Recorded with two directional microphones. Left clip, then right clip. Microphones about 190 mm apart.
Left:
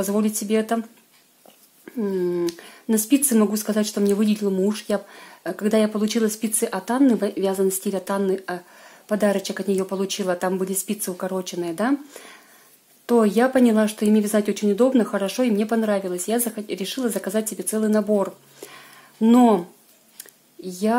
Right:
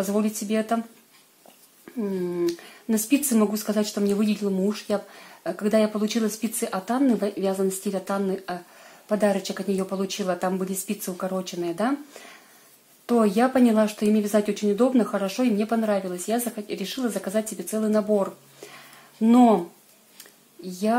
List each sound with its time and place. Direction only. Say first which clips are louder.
0.0 s speech: left 2 dB; 35° left (ahead or behind)
2.0 s speech: left 4 dB; 35° left (ahead or behind)
20.6 s speech: left 2 dB; 40° left (ahead or behind)